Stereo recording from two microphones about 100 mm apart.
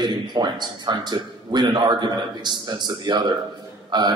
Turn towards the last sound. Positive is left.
turn(degrees=-45)  # may be behind; listen again after turning